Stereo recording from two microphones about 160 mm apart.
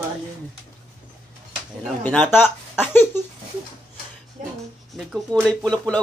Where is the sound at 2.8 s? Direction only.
15° left (ahead or behind).